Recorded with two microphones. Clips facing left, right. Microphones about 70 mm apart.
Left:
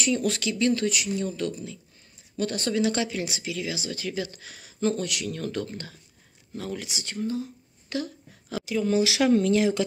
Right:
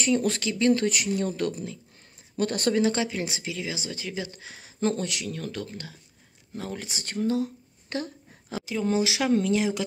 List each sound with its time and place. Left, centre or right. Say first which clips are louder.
0.0 s speech: right 1 dB; right
0.8 s speech: right 1 dB; right
2.7 s speech: even; right
5.2 s speech: left 3 dB; centre
6.5 s speech: left 1 dB; right
6.9 s speech: left 1 dB; right
7.2 s speech: right 4 dB; right
7.9 s speech: left 1 dB; right
8.5 s speech: left 2 dB; right
9.3 s speech: left 1 dB; centre